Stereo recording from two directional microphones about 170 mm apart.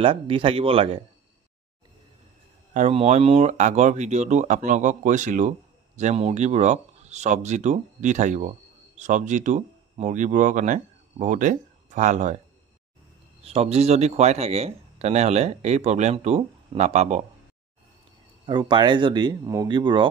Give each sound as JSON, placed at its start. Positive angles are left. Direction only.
{"t": 0.0, "sound": "speech", "side_deg": -30}
{"t": 2.7, "sound": "speech", "side_deg": -40}
{"t": 13.4, "sound": "speech", "side_deg": -35}
{"t": 18.4, "sound": "speech", "side_deg": -25}